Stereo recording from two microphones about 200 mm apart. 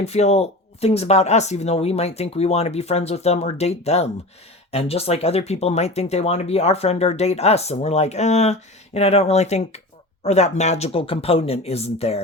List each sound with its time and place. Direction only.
0.0 s speech: 35° left (ahead or behind)